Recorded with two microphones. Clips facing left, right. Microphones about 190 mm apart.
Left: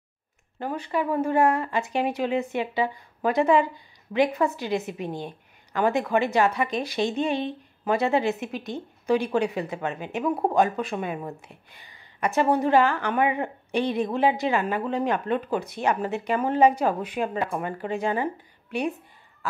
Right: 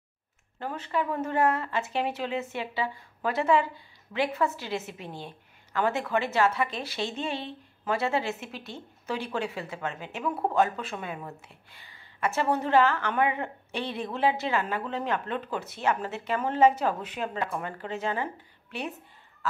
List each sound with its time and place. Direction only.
0.6 s a woman's voice: 15° left (ahead or behind)